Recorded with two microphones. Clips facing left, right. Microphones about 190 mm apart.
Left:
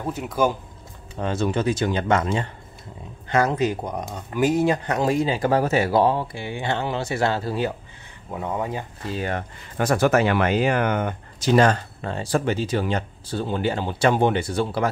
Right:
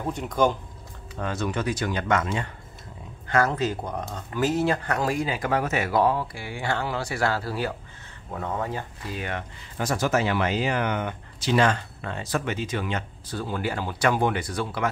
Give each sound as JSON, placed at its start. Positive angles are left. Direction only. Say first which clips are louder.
{"t": 0.0, "sound": "speech", "louder": "left 1 dB", "side_deg": 5}
{"t": 1.1, "sound": "speech", "louder": "left 5 dB", "side_deg": 25}
{"t": 3.3, "sound": "speech", "louder": "left 3 dB", "side_deg": 20}
{"t": 9.0, "sound": "speech", "louder": "left 8 dB", "side_deg": 35}
{"t": 9.8, "sound": "speech", "louder": "left 5 dB", "side_deg": 60}